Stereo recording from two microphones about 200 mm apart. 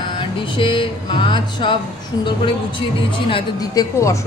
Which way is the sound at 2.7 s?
25° left (ahead or behind).